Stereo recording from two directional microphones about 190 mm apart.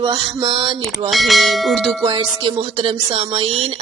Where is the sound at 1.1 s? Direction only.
Centre (ahead or behind).